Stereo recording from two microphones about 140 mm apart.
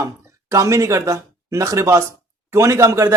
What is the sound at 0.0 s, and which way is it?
Speech, 20° right (ahead or behind).